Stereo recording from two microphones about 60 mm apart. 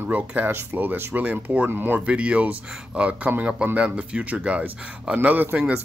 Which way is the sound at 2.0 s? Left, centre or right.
Centre.